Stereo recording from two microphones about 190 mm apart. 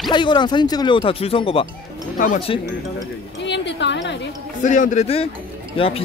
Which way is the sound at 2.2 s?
40° left (ahead or behind).